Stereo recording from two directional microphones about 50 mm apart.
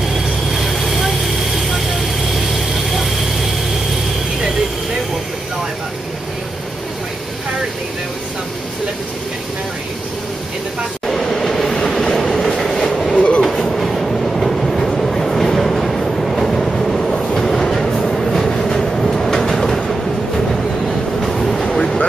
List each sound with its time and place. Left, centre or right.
0.6 s vehicle: centre
11.1 s train: centre
13.1 s train: left
13.4 s train: centre
21.7 s a sound: centre